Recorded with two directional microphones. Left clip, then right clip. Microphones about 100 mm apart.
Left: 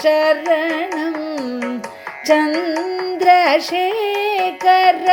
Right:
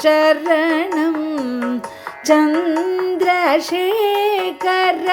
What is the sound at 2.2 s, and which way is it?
Music, 5° right (ahead or behind).